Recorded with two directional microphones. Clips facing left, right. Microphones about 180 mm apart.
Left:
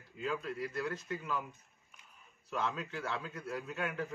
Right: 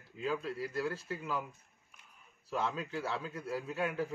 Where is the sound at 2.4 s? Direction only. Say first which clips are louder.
Right 1 dB; 30° right (ahead or behind).